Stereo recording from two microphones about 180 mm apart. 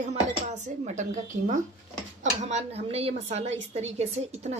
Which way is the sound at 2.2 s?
40° right (ahead or behind).